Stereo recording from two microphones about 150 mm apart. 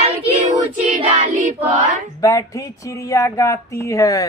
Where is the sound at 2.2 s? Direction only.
20° left (ahead or behind).